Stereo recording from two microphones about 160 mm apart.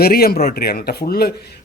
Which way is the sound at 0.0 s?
70° left (ahead or behind).